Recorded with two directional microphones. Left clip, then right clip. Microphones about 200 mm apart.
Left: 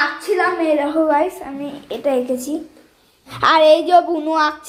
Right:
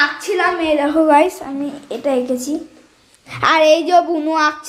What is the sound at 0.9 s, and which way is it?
Speech, 35° right (ahead or behind).